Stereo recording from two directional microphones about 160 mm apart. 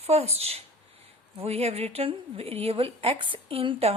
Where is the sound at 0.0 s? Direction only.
40° right (ahead or behind).